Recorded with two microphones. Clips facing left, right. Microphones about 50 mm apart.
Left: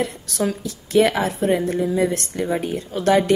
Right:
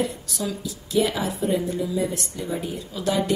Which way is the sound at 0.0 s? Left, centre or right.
Left.